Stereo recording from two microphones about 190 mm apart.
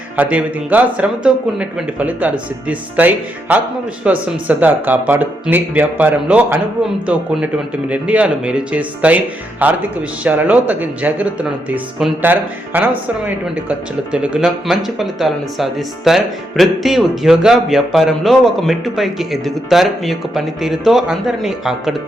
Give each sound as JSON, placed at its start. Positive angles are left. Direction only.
{"t": 0.2, "sound": "speech", "side_deg": -10}